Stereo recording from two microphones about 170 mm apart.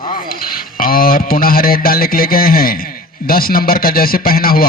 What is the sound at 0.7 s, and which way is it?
Speech, 55° left (ahead or behind).